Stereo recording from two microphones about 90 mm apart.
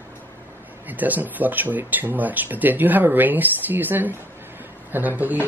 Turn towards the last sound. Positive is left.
turn(degrees=-20)  # may be behind; listen again after turning